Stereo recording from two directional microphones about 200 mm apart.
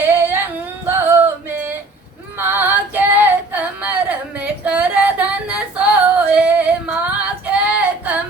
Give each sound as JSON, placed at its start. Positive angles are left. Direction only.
{"t": 0.1, "sound": "female singing", "side_deg": -10}
{"t": 0.9, "sound": "music", "side_deg": -10}
{"t": 2.4, "sound": "female singing", "side_deg": -10}